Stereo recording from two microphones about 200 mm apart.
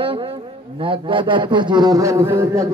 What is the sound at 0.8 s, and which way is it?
A man's voice, 25° right (ahead or behind).